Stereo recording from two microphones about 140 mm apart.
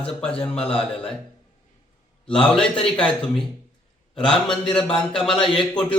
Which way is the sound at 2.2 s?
5° left (ahead or behind).